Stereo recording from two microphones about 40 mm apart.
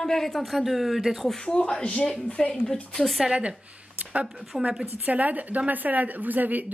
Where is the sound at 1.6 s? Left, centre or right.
Left.